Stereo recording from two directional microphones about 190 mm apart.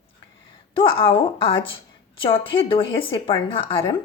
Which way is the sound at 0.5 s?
25° left (ahead or behind).